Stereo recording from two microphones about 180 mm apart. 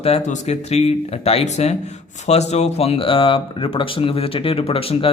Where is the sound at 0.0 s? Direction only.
40° left (ahead or behind).